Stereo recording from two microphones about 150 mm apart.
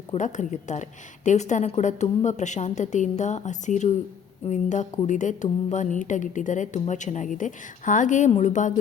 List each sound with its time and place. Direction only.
0.1 s a woman's voice: 55° left (ahead or behind)